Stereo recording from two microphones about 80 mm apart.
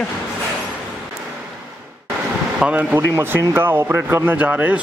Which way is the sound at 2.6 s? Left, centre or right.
Centre.